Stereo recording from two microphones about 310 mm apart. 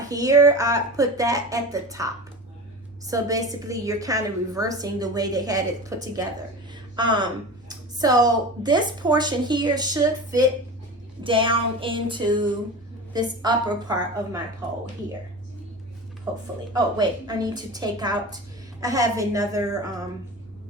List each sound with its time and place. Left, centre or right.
0.0 s a woman's voice: centre
3.1 s a woman's voice: centre
16.7 s a woman's voice: centre